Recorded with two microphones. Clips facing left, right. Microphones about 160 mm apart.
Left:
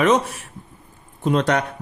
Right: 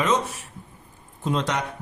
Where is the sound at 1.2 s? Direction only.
65° left (ahead or behind).